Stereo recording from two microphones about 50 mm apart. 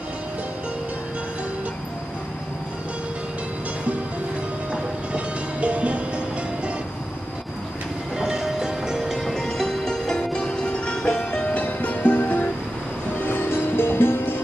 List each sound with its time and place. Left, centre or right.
5.1 s music: right
8.2 s music: centre
9.1 s music: centre; by 14.4 s left